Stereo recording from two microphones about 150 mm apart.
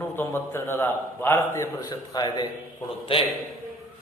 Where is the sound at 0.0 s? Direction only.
15° left (ahead or behind).